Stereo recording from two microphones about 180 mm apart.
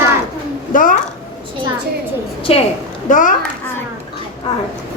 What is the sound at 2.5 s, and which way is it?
Speech, 35° left (ahead or behind).